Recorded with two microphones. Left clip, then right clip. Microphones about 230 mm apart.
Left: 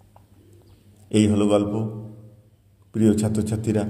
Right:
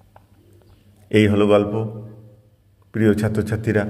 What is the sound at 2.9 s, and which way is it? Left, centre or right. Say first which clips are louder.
Speech: right 3 dB; right.